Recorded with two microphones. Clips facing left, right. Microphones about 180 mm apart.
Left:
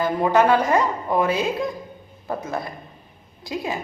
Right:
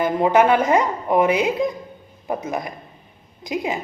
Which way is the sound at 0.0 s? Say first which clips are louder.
Right 2 dB; 20° right (ahead or behind).